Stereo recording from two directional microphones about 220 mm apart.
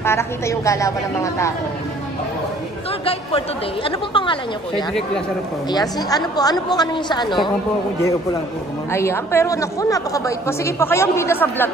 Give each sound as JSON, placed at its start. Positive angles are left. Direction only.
{"t": 0.0, "sound": "a woman's voice", "side_deg": 10}
{"t": 3.1, "sound": "a woman's voice", "side_deg": 25}
{"t": 8.9, "sound": "a woman's voice", "side_deg": 10}